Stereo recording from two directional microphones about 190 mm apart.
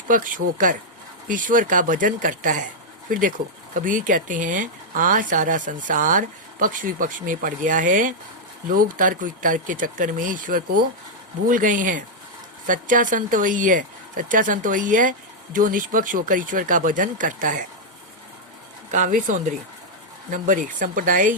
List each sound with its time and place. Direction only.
0.1 s speech: 45° right (ahead or behind)
18.9 s speech: 40° right (ahead or behind)